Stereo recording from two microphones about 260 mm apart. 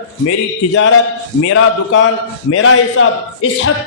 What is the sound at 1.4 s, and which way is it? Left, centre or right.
A man's voice, left.